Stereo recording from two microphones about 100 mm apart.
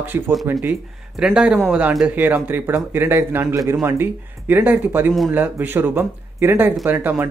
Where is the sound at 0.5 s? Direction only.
20° right (ahead or behind).